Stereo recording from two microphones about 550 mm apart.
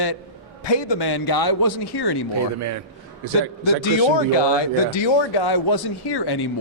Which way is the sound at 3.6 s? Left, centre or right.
Left.